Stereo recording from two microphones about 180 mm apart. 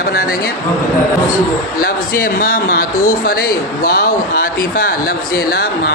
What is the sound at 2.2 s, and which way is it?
Speech, 50° left (ahead or behind).